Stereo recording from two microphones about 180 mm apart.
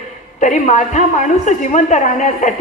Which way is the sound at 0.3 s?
40° left (ahead or behind).